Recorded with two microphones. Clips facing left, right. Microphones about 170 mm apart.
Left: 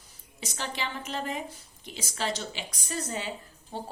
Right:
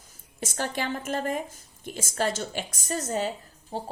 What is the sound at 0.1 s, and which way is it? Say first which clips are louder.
Speech: right 5 dB; 50° right (ahead or behind).